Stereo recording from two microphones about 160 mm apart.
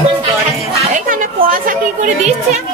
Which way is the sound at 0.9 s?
60° right (ahead or behind).